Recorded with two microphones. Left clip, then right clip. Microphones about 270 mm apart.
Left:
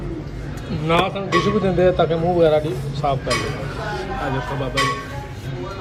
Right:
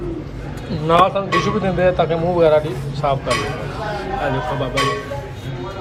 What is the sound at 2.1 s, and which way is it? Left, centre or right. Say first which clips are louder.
Speech: right 2 dB; right.